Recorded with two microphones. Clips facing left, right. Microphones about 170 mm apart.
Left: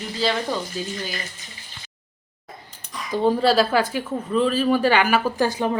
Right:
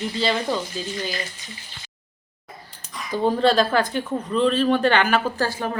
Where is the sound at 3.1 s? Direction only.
5° left (ahead or behind).